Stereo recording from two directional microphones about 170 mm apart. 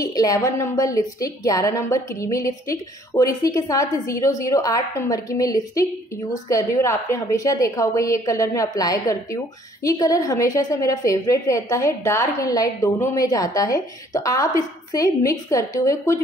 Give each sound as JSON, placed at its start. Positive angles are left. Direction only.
{"t": 0.0, "sound": "a woman's voice", "side_deg": 20}
{"t": 9.8, "sound": "a woman's voice", "side_deg": 20}